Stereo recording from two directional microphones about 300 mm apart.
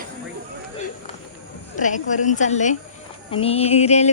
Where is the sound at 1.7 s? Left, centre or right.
Left.